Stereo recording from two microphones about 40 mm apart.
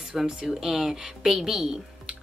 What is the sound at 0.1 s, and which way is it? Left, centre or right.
Speech, centre.